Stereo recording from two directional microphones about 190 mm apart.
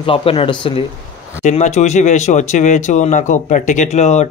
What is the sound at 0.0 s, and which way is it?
Speech, 30° left (ahead or behind).